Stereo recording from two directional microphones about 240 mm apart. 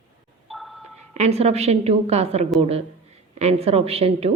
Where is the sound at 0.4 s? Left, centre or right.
Centre.